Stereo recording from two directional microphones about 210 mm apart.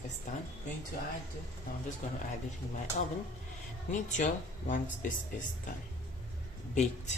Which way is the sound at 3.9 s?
35° left (ahead or behind).